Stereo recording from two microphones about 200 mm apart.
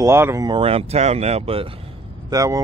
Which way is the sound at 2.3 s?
15° right (ahead or behind).